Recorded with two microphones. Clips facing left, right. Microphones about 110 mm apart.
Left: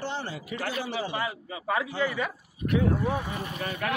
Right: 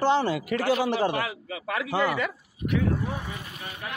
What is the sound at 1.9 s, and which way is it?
Speech, 90° right.